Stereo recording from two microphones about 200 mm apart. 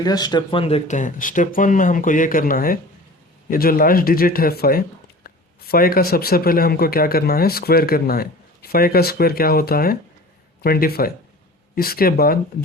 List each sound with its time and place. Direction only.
0.0 s speech: 20° left (ahead or behind); by 12.4 s 50° left (ahead or behind)